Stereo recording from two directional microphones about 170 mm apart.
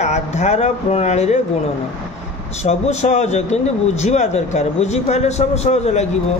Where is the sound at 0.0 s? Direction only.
40° left (ahead or behind).